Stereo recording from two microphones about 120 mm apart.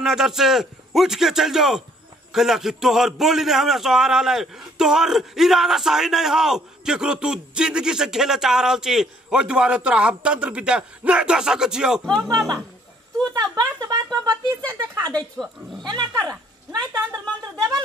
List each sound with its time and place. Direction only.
0.0 s a man's voice: 5° right (ahead or behind)
12.3 s speech: 30° right (ahead or behind)
15.3 s a man's voice: centre (ahead or behind)
15.8 s a woman's voice: 35° right (ahead or behind)